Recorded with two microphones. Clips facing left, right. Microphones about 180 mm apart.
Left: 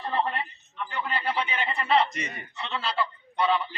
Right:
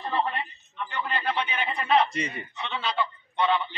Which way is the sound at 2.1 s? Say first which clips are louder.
Right 4 dB; 30° right (ahead or behind).